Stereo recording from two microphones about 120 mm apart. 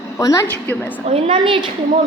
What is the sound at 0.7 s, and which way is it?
Speech, 15° left (ahead or behind).